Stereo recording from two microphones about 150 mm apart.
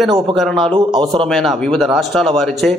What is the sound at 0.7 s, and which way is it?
Speech, 25° right (ahead or behind).